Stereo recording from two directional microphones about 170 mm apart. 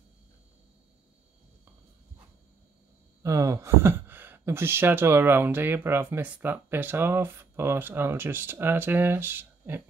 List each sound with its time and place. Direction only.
3.2 s speech: 20° right (ahead or behind)